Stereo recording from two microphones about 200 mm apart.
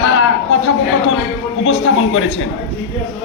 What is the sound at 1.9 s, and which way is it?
Speech, 90° left.